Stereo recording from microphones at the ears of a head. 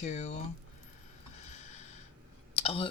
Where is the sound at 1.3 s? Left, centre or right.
Left.